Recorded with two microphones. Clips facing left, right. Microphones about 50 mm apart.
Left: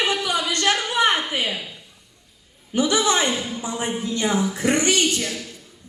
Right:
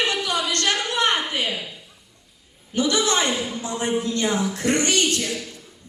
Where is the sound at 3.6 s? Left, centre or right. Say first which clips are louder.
Right 2 dB; centre.